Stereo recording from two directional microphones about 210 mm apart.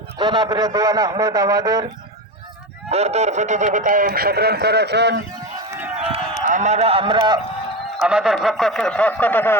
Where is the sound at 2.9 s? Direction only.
30° right (ahead or behind); by 5.2 s 55° right (ahead or behind).